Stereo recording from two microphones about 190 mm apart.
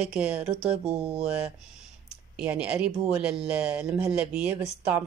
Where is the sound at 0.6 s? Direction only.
35° right (ahead or behind).